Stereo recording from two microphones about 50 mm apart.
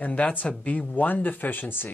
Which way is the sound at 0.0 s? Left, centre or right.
Left.